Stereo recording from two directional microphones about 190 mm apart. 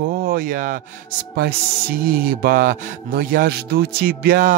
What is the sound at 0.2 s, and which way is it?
Speech, 50° right (ahead or behind).